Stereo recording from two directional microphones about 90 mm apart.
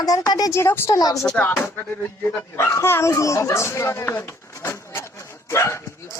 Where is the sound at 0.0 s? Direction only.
45° left (ahead or behind).